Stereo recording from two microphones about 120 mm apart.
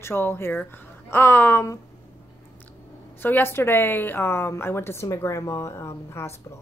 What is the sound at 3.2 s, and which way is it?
A woman's voice, 15° left (ahead or behind).